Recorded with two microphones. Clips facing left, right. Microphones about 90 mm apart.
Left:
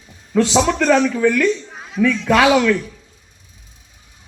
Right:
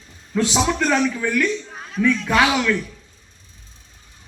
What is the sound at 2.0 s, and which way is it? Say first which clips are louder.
Speech: left 3 dB; 75° left (ahead or behind).